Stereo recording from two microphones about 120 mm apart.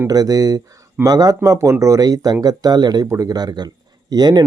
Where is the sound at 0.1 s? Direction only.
30° right (ahead or behind).